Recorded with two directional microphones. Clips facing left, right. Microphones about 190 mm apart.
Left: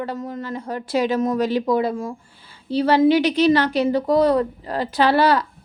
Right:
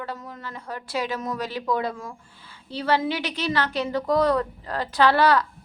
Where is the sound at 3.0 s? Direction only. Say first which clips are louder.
Left 12 dB; 15° left (ahead or behind).